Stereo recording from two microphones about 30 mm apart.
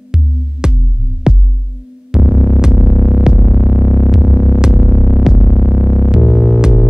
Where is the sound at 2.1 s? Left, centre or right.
Centre.